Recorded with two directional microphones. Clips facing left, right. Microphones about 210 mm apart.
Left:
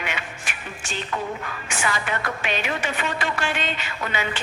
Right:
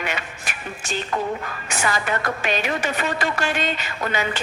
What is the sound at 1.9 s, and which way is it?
Music, 40° right (ahead or behind).